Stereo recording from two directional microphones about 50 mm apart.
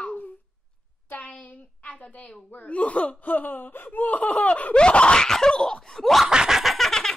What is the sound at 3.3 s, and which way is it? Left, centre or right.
Laughter, left.